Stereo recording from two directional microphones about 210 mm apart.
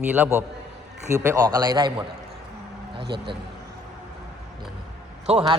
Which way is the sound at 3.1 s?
25° right (ahead or behind).